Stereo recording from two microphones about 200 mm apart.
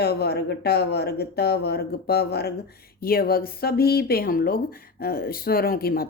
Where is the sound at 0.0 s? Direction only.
50° left (ahead or behind).